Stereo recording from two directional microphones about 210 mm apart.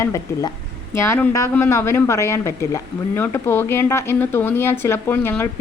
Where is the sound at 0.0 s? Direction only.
15° left (ahead or behind).